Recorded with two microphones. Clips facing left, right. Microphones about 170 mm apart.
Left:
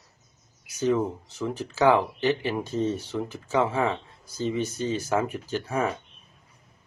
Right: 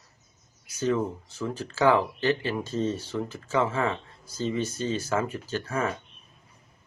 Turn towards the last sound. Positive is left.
turn(degrees=15)  # may be behind; listen again after turning